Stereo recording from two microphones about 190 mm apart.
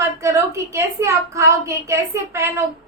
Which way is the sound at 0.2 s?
15° right (ahead or behind).